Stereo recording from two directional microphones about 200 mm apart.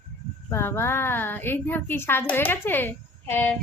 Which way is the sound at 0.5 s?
10° left (ahead or behind).